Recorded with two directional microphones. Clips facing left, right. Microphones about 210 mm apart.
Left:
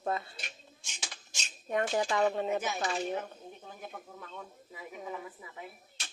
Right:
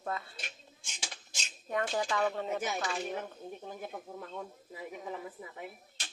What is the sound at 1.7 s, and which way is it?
Speech, 20° left (ahead or behind).